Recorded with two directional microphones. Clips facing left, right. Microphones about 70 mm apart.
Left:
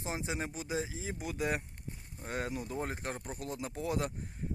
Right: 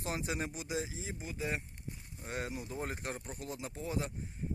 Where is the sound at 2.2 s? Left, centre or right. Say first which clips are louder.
Left 3 dB; left.